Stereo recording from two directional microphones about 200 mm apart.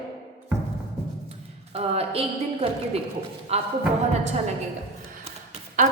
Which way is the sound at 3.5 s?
30° right (ahead or behind).